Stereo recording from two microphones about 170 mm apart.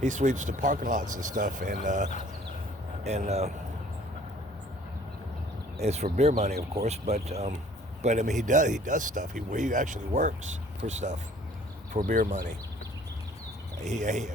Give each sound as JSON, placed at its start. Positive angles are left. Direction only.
{"t": 0.0, "sound": "speech", "side_deg": -45}
{"t": 5.8, "sound": "speech", "side_deg": -40}
{"t": 12.0, "sound": "speech", "side_deg": -55}
{"t": 13.8, "sound": "speech", "side_deg": -45}